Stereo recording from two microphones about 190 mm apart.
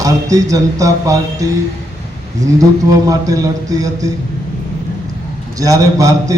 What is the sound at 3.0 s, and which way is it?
A man's voice, 20° right (ahead or behind).